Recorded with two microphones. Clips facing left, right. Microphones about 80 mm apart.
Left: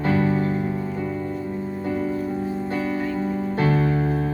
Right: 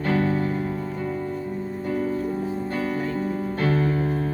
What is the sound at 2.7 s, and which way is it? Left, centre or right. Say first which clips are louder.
Music: left 2 dB; right.